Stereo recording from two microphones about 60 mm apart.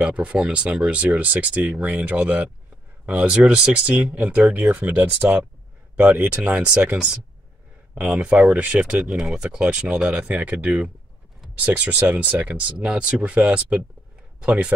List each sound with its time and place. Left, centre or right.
0.0 s speech: right